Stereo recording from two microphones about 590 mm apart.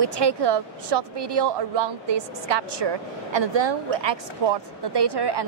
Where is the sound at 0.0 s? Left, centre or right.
Right.